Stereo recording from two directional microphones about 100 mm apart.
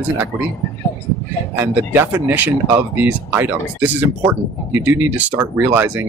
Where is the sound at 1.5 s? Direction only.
20° right (ahead or behind).